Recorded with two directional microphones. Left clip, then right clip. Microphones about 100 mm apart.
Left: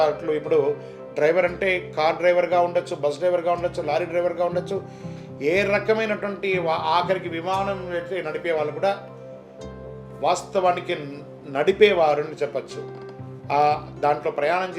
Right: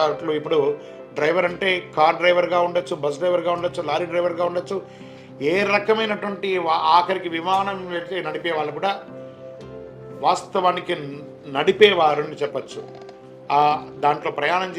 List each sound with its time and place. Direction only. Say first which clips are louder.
0.0 s speech: even; 50° right (ahead or behind)
10.2 s speech: right 2 dB; 55° right (ahead or behind)